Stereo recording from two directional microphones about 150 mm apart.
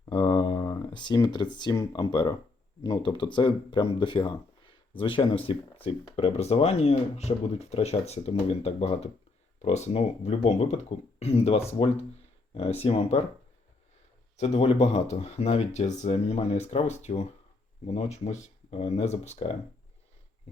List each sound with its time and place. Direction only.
0.0 s speech: 30° left (ahead or behind)
14.3 s speech: 45° left (ahead or behind)